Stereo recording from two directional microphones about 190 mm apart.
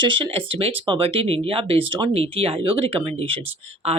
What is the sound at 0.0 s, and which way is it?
A woman's voice, 25° right (ahead or behind).